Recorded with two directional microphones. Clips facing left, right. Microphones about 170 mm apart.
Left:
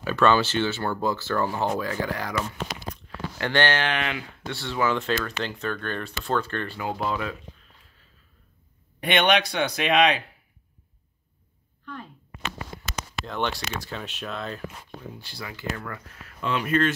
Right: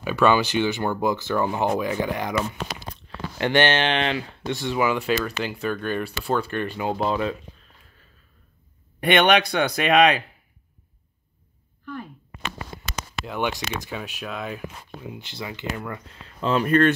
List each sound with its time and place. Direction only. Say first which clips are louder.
0.0 s speech: right 1 dB; 10° right (ahead or behind)
2.9 s a sound: even; 20° right (ahead or behind)
4.5 s speech: right 3 dB; 15° right (ahead or behind)
9.0 s speech: right 4 dB; 55° right (ahead or behind)
13.2 s speech: right 2 dB; 10° right (ahead or behind); by 16.9 s 45° right (ahead or behind)